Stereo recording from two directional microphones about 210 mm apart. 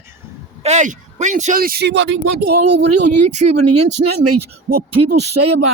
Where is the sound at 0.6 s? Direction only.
35° right (ahead or behind); by 2.5 s 55° right (ahead or behind).